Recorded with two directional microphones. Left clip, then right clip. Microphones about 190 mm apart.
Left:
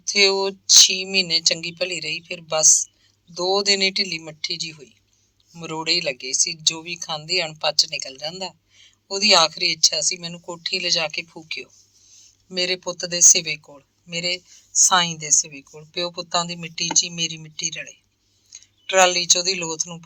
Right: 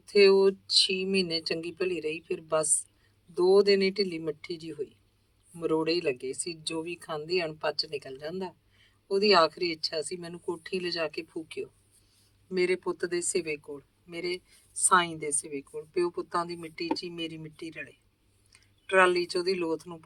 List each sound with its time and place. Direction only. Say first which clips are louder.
0.0 s a woman's voice: left 2 dB; 15° left (ahead or behind)